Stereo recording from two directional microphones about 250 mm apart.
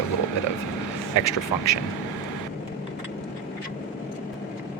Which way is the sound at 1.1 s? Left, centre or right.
Left.